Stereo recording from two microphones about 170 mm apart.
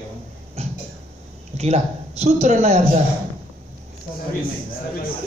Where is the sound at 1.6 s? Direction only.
40° right (ahead or behind).